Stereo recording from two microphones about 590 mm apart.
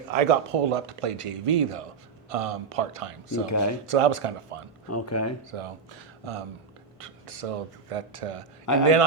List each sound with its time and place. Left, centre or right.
0.1 s speech: right
3.4 s speech: left
3.8 s speech: right
4.9 s speech: left
5.5 s speech: right
7.0 s speech: right
8.6 s a man's voice: left